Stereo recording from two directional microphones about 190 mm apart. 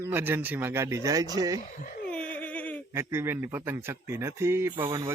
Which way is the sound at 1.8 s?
50° left (ahead or behind).